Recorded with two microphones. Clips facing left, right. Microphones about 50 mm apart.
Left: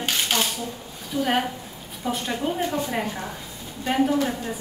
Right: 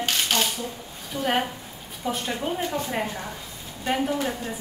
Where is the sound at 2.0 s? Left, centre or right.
Centre.